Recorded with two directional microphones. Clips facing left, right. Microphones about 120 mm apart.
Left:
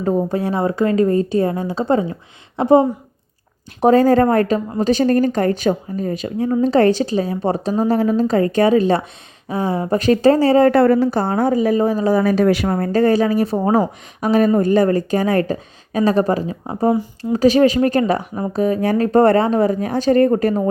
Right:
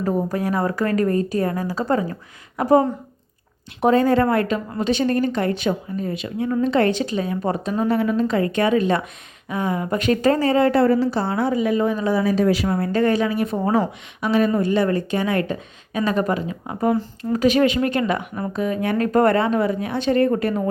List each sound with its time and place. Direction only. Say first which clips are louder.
0.0 s speech: left 3 dB; 25° left (ahead or behind)
3.8 s speech: left 4 dB; 35° left (ahead or behind)
10.7 s a woman's voice: left 4 dB; 55° left (ahead or behind); by 12.2 s 35° left (ahead or behind)
12.2 s a woman's voice: left 3 dB; 60° left (ahead or behind); by 16.9 s 30° left (ahead or behind)
16.9 s speech: left 3 dB; 15° left (ahead or behind)
17.3 s speech: left 4 dB; 30° left (ahead or behind)